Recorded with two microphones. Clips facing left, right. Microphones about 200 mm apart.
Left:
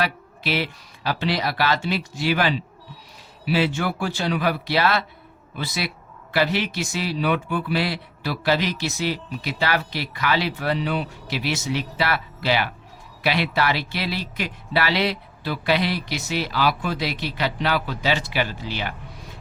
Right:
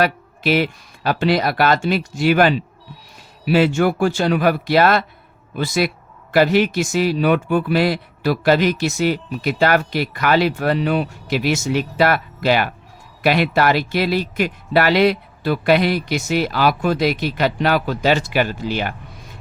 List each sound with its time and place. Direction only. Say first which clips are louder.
0.0 s speech: right 7 dB; 50° right (ahead or behind)